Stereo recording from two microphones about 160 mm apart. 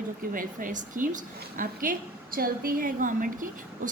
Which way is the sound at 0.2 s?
60° right (ahead or behind).